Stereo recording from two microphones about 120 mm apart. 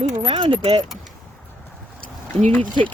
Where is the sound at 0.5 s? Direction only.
55° right (ahead or behind).